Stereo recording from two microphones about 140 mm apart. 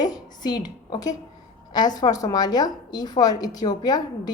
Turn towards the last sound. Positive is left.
turn(degrees=30)  # may be behind; listen again after turning